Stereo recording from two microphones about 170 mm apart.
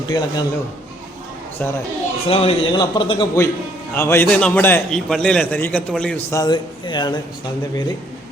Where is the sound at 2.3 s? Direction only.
35° left (ahead or behind).